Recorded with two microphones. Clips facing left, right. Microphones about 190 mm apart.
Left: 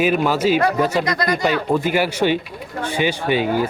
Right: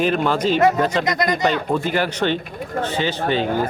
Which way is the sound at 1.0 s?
20° right (ahead or behind).